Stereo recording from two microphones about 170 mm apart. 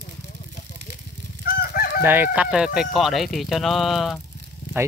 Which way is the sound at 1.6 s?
60° left (ahead or behind).